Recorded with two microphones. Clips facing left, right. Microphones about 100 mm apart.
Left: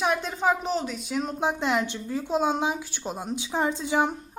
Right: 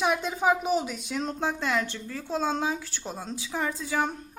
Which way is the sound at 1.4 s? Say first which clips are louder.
Left 3 dB; 20° left (ahead or behind).